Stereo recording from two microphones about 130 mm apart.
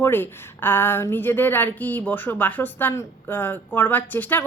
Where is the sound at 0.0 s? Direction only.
15° left (ahead or behind).